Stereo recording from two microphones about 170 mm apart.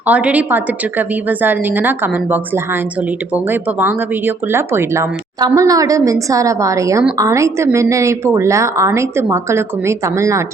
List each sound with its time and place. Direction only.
0.0 s speech: 10° right (ahead or behind)